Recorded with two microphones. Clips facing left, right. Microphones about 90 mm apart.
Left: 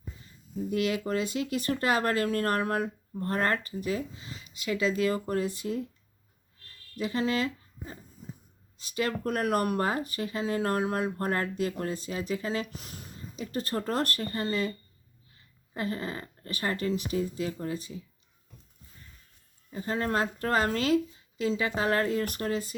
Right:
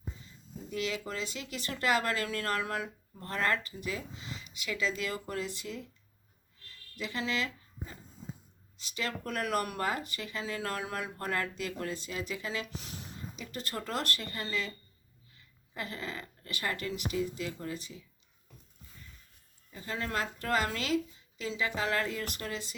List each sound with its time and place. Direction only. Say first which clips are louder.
0.7 s speech: left 7 dB; 45° left (ahead or behind)
6.9 s speech: left 6 dB; 40° left (ahead or behind)
19.7 s speech: left 6 dB; 35° left (ahead or behind)